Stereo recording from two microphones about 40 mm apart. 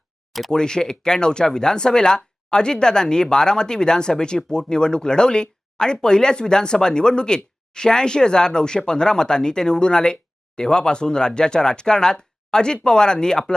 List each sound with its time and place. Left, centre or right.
0.5 s speech: centre